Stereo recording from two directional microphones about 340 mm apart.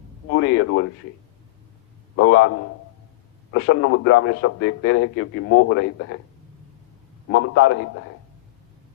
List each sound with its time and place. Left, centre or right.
0.3 s a man's voice: left
2.1 s a man's voice: left
7.3 s a man's voice: left